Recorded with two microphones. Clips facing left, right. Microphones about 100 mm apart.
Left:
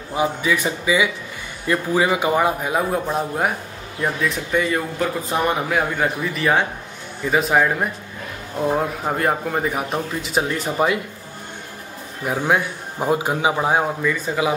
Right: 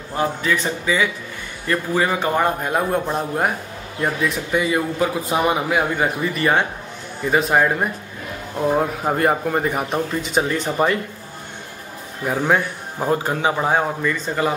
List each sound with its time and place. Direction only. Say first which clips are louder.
0.1 s a man's voice: left 1 dB; 10° left (ahead or behind)
12.3 s a man's voice: right 1 dB; 5° left (ahead or behind)